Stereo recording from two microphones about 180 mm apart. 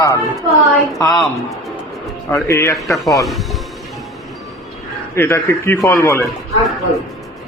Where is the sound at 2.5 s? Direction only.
15° left (ahead or behind).